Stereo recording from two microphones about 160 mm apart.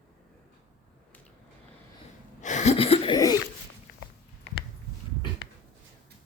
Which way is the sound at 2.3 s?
50° left (ahead or behind).